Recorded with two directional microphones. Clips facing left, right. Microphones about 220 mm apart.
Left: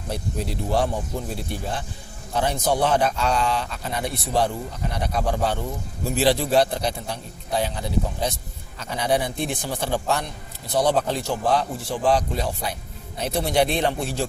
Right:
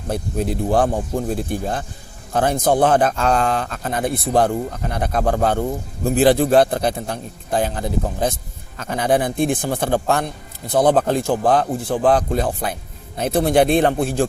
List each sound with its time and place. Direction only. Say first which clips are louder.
0.1 s speech: right 6 dB; 50° right (ahead or behind)